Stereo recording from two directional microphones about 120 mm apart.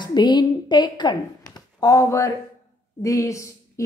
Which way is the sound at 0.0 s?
40° left (ahead or behind).